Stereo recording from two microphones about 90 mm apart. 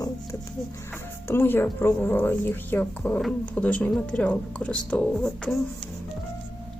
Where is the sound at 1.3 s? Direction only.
25° left (ahead or behind); by 5.6 s 10° left (ahead or behind).